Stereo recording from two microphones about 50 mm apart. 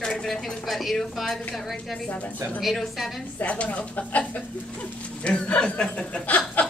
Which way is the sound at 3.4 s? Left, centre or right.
Left.